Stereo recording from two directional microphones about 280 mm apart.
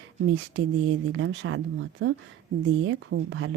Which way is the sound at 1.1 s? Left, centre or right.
Right.